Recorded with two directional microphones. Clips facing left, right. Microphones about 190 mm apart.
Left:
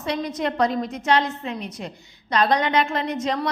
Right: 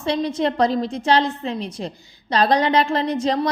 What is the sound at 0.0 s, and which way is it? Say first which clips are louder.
A woman's voice: right 4 dB; 30° right (ahead or behind).